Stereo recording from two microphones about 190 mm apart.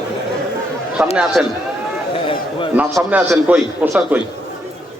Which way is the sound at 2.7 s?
10° right (ahead or behind).